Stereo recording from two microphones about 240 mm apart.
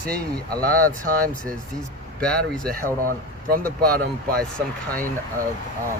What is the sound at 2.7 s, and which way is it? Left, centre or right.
Speech, right.